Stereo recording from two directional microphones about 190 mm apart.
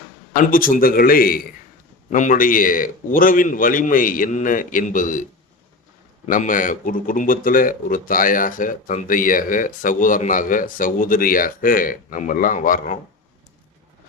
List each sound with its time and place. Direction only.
0.3 s a man's voice: 45° left (ahead or behind)
6.2 s a man's voice: 45° left (ahead or behind)